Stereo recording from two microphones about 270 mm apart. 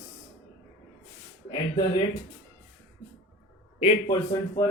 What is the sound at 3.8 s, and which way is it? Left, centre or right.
Speech, centre.